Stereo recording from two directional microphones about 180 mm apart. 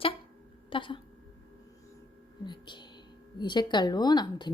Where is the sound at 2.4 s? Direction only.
25° left (ahead or behind).